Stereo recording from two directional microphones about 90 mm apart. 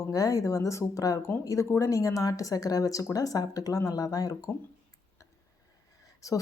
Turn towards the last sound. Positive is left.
turn(degrees=40)  # may be behind; listen again after turning